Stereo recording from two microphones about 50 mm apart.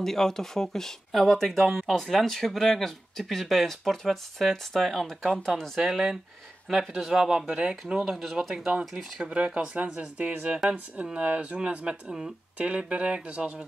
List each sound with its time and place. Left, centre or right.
0.0 s speech: centre
5.8 s speech: centre
7.1 s speech: centre
8.7 s speech: right